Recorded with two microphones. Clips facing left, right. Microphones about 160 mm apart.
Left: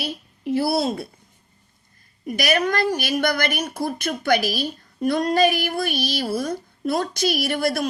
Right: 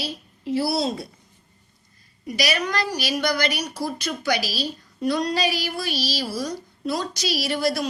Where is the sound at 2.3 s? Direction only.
50° left (ahead or behind).